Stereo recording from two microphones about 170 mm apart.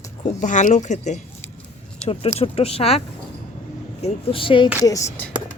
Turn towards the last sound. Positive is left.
turn(degrees=15)  # may be behind; listen again after turning